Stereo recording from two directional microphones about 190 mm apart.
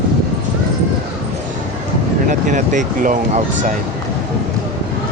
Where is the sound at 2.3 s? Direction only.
40° right (ahead or behind).